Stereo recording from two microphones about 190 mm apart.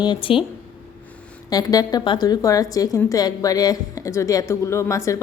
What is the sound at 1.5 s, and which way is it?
A woman's voice, 20° left (ahead or behind).